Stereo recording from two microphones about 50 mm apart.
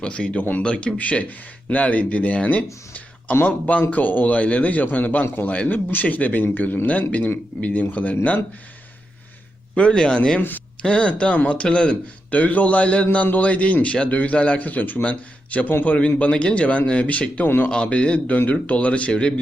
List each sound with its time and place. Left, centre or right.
0.0 s a man's voice: left
9.7 s speech: centre
12.3 s a man's voice: left
17.4 s a man's voice: left
17.7 s speech: left